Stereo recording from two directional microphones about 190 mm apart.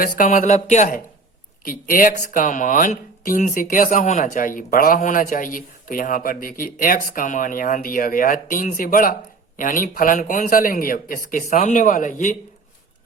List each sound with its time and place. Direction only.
0.0 s speech: 45° left (ahead or behind)